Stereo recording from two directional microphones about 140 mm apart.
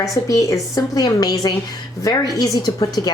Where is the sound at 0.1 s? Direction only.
25° left (ahead or behind).